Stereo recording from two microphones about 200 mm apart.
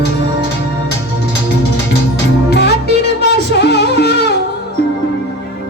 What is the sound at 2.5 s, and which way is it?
Music, 55° left (ahead or behind).